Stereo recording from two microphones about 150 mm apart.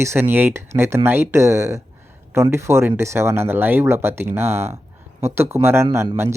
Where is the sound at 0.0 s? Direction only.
15° right (ahead or behind).